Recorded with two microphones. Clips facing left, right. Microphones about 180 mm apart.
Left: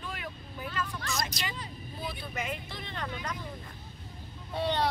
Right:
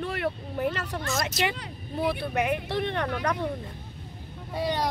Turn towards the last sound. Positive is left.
turn(degrees=-10)  # may be behind; listen again after turning